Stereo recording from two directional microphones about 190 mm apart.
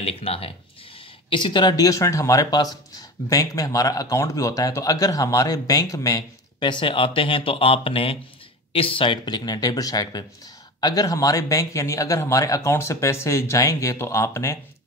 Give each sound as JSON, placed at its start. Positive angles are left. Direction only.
{"t": 0.0, "sound": "speech", "side_deg": 30}